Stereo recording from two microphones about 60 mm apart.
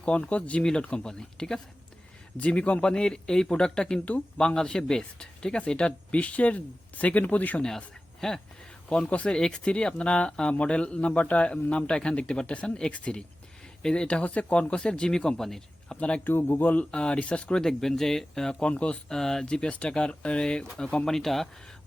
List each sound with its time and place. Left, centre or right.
0.0 s a man's voice: centre
2.4 s speech: centre
7.6 s a man's voice: centre
16.0 s a man's voice: centre
16.2 s speech: left
16.9 s speech: centre
18.7 s speech: centre